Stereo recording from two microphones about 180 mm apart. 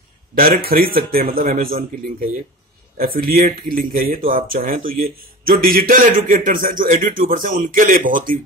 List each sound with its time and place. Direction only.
0.3 s a man's voice: 55° right (ahead or behind)
3.0 s speech: 55° right (ahead or behind)